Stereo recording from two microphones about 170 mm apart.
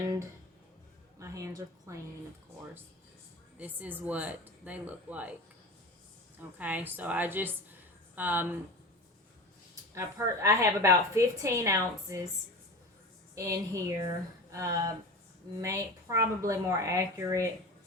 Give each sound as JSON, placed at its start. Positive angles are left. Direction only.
{"t": 1.2, "sound": "a woman's voice", "side_deg": -20}
{"t": 3.6, "sound": "a woman's voice", "side_deg": -10}
{"t": 6.6, "sound": "a woman's voice", "side_deg": -10}
{"t": 9.9, "sound": "a woman's voice", "side_deg": -15}
{"t": 13.3, "sound": "a woman's voice", "side_deg": -20}